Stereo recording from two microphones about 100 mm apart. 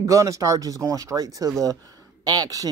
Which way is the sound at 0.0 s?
35° right (ahead or behind).